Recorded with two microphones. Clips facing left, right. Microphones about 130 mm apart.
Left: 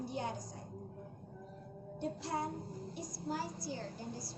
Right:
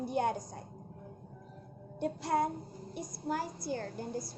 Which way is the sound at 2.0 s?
60° right (ahead or behind).